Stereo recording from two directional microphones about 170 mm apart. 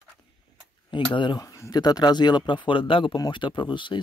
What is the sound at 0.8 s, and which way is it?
Speech, 30° left (ahead or behind).